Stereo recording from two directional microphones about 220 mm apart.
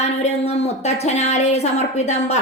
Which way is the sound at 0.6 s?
30° left (ahead or behind).